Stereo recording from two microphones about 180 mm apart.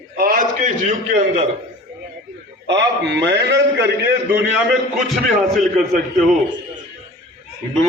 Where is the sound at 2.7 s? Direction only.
75° right (ahead or behind).